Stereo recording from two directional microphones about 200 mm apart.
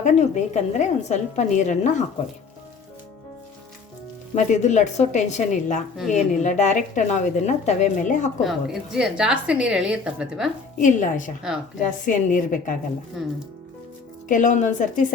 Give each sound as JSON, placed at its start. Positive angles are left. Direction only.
{"t": 0.0, "sound": "a woman's voice", "side_deg": 35}
{"t": 4.4, "sound": "a woman's voice", "side_deg": 35}
{"t": 8.4, "sound": "a woman's voice", "side_deg": 0}
{"t": 10.8, "sound": "a woman's voice", "side_deg": 40}
{"t": 14.3, "sound": "a woman's voice", "side_deg": 40}